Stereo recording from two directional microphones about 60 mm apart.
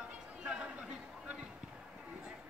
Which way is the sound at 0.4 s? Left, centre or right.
Centre.